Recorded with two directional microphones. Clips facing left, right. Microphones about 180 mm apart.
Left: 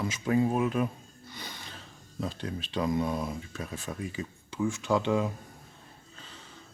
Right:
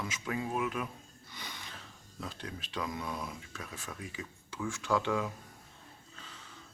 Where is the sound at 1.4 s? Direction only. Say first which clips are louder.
Left 3 dB; 35° left (ahead or behind).